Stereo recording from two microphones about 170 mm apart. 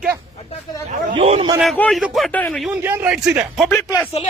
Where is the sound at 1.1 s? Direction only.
35° right (ahead or behind).